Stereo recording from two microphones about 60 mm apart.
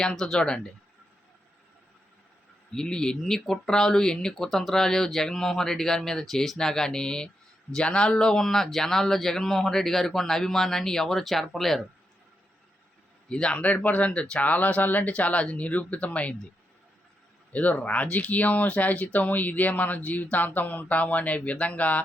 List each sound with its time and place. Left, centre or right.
0.0 s speech: centre
2.7 s speech: centre
13.2 s speech: centre
17.5 s speech: left